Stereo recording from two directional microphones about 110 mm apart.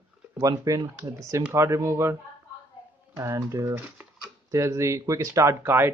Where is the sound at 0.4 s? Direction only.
30° right (ahead or behind).